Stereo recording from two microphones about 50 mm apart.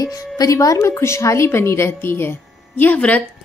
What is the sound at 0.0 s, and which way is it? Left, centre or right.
A woman's voice, left.